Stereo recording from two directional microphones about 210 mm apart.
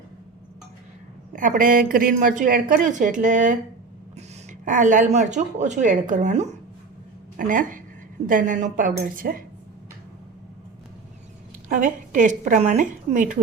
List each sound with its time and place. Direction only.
1.3 s speech: 40° right (ahead or behind)
4.6 s speech: 40° right (ahead or behind)
11.7 s speech: 40° right (ahead or behind)